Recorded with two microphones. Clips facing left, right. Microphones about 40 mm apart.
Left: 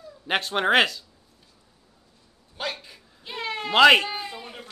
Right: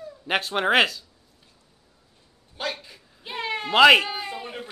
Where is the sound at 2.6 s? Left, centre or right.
Centre.